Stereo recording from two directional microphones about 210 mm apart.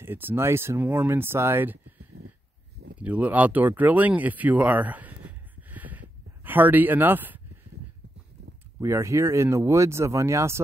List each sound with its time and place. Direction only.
0.0 s speech: 10° right (ahead or behind)
2.2 s a sound: 50° right (ahead or behind)
3.0 s speech: 5° right (ahead or behind)
8.8 s speech: 15° right (ahead or behind)